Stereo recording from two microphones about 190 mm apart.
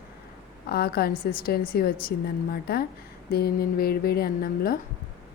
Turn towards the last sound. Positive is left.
turn(degrees=50)  # may be behind; listen again after turning